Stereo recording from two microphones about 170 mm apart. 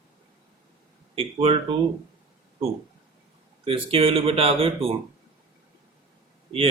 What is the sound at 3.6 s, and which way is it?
Speech, 35° right (ahead or behind).